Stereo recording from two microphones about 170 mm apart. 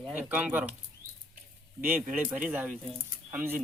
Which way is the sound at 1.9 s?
10° right (ahead or behind).